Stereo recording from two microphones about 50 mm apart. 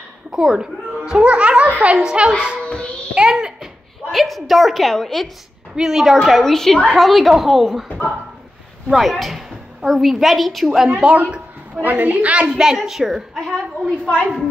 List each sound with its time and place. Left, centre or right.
0.3 s a sound: centre; by 2.0 s right
2.0 s a child's voice: centre
4.1 s a woman's voice: centre
5.8 s a woman's voice: centre
8.9 s a woman's voice: centre
11.0 s a woman's voice: right
11.8 s a woman's voice: right
12.4 s a child's voice: centre